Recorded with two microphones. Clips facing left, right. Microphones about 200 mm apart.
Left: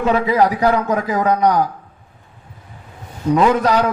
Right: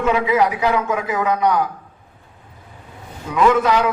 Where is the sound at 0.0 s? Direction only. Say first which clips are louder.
Left 2 dB; 35° left (ahead or behind).